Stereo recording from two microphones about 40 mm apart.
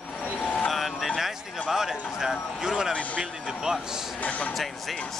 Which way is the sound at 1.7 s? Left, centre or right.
Centre.